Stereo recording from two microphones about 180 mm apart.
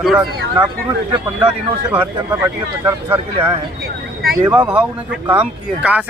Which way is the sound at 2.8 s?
20° right (ahead or behind).